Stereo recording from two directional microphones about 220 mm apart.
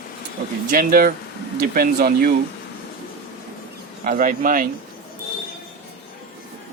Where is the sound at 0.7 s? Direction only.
40° right (ahead or behind).